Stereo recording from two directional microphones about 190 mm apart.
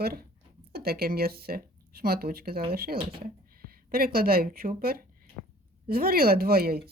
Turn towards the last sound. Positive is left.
turn(degrees=-55)  # may be behind; listen again after turning